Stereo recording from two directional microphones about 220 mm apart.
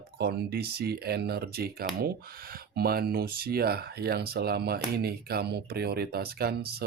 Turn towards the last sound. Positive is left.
turn(degrees=-45)  # may be behind; listen again after turning